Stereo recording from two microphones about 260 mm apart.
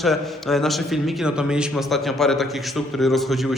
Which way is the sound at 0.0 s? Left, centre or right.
Centre.